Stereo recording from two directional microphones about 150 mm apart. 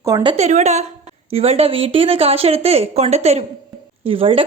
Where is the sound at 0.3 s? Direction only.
50° right (ahead or behind).